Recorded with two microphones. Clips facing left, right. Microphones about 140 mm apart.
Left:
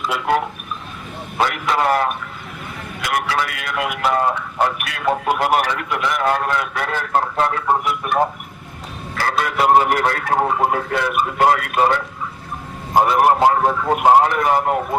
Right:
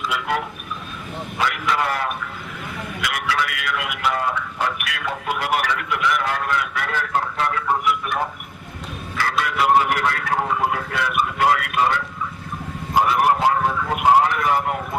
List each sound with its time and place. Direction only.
0.1 s speech: 35° left (ahead or behind)